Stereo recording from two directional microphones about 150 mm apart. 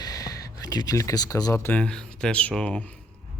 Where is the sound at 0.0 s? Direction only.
25° left (ahead or behind).